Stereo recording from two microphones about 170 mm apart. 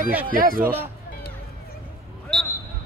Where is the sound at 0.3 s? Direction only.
55° right (ahead or behind).